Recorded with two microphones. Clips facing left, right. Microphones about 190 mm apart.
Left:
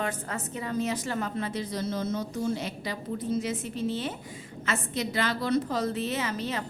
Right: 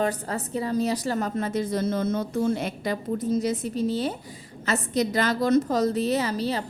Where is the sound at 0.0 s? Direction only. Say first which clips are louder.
Right 6 dB; 35° right (ahead or behind).